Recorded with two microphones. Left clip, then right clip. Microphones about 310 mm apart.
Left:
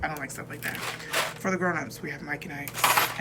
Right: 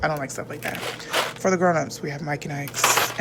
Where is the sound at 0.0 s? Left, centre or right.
Centre.